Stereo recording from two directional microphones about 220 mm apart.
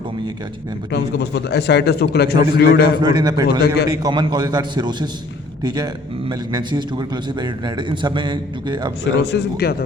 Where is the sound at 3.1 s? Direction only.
20° right (ahead or behind).